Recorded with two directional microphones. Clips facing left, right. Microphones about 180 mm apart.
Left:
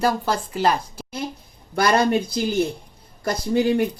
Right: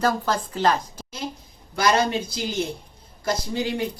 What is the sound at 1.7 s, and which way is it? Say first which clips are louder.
Speech: left 2 dB; 55° left (ahead or behind).